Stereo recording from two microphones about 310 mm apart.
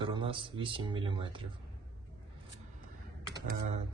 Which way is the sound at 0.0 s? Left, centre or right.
Centre.